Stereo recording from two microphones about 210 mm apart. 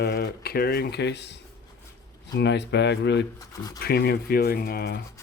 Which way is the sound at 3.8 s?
50° left (ahead or behind).